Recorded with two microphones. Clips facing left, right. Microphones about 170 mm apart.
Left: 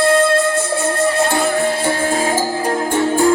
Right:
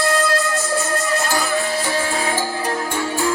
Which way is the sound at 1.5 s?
55° left (ahead or behind).